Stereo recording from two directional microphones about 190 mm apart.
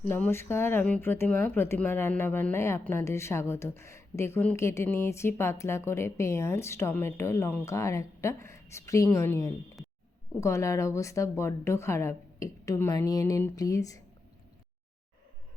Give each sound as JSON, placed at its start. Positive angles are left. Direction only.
{"t": 0.0, "sound": "speech", "side_deg": 10}